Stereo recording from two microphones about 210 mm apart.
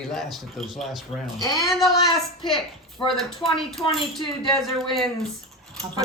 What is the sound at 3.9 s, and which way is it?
Speech, centre (ahead or behind).